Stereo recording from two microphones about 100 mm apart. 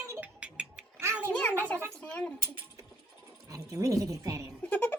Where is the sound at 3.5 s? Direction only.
35° right (ahead or behind).